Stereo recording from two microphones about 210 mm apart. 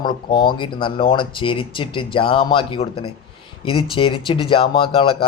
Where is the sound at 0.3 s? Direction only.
20° left (ahead or behind).